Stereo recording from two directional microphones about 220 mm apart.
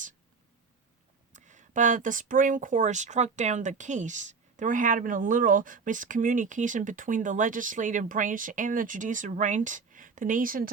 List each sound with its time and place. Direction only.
1.3 s speech: 35° right (ahead or behind)